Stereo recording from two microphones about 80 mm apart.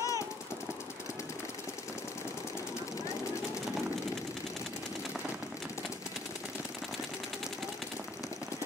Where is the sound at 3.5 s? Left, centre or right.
Centre.